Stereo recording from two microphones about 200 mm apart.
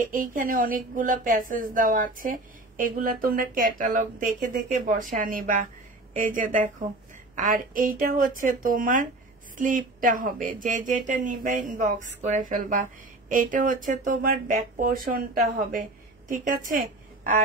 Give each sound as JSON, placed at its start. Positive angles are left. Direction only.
{"t": 0.1, "sound": "a woman's voice", "side_deg": -45}